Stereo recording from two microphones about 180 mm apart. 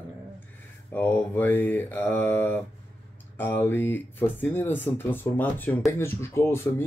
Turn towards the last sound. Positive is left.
turn(degrees=15)  # may be behind; listen again after turning